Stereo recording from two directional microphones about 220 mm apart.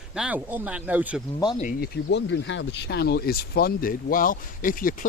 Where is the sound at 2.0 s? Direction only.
55° left (ahead or behind).